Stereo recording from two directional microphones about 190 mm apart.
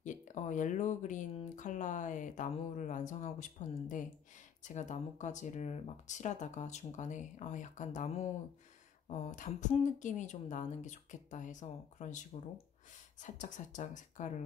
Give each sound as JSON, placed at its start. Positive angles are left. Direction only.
{"t": 0.0, "sound": "speech", "side_deg": 40}
{"t": 13.2, "sound": "speech", "side_deg": 40}